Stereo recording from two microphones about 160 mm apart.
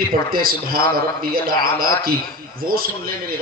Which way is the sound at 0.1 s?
65° right (ahead or behind).